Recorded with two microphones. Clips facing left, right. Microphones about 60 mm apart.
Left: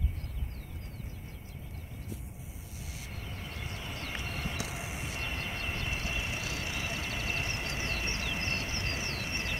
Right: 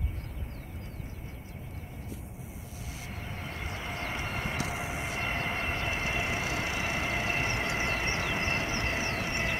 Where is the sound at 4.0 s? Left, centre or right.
Right.